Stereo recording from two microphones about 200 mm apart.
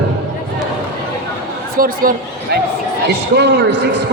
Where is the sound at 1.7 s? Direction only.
45° right (ahead or behind).